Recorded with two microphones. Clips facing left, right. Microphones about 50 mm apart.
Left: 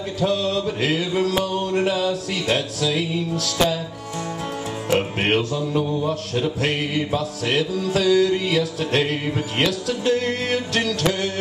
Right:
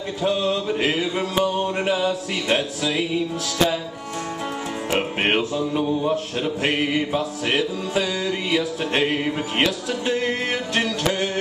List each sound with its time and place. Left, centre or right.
0.2 s mantra: centre
4.8 s music: centre
6.0 s mantra: centre